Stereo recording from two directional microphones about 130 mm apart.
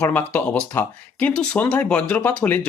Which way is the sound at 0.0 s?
15° left (ahead or behind).